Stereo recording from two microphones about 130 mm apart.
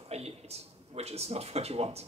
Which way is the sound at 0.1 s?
55° right (ahead or behind).